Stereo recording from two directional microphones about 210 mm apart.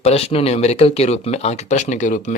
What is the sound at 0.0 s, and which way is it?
Speech, 30° left (ahead or behind).